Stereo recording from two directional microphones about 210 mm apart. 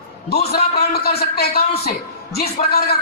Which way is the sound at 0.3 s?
50° left (ahead or behind).